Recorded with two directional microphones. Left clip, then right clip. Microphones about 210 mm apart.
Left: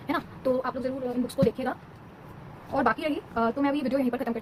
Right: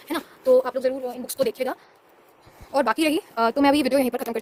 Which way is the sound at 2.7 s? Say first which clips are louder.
Right 5 dB; 65° right (ahead or behind).